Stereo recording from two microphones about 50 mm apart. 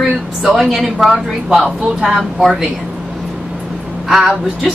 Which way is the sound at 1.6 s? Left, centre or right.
Centre.